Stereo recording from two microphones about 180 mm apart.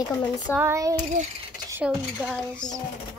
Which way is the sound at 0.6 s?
20° right (ahead or behind).